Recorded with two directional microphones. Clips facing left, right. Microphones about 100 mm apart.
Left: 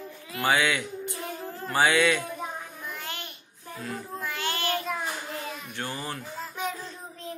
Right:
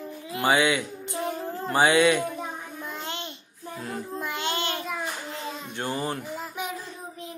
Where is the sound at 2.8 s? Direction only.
25° right (ahead or behind).